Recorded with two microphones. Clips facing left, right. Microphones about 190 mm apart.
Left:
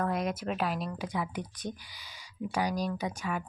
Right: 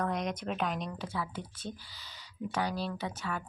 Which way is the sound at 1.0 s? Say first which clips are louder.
Left 3 dB; 15° left (ahead or behind).